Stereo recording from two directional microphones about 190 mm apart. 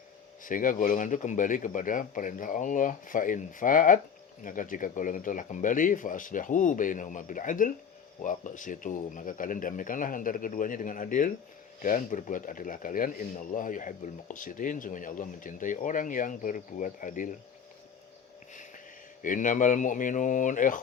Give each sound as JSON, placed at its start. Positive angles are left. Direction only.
{"t": 0.4, "sound": "speech", "side_deg": 45}
{"t": 19.2, "sound": "speech", "side_deg": 45}